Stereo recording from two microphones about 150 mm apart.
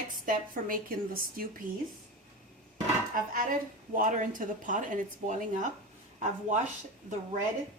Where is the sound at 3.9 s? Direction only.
60° right (ahead or behind).